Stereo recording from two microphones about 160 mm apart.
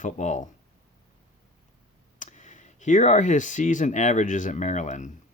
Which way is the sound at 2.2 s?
50° left (ahead or behind).